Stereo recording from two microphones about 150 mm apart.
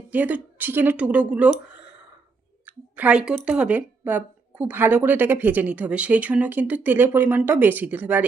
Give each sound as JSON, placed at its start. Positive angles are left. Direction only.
{"t": 0.1, "sound": "speech", "side_deg": -10}
{"t": 2.6, "sound": "speech", "side_deg": -10}